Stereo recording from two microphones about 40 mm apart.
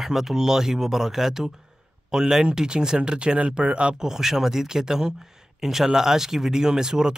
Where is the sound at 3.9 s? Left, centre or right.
Centre.